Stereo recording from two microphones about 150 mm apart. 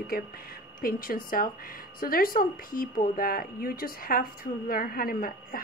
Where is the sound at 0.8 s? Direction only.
70° left (ahead or behind).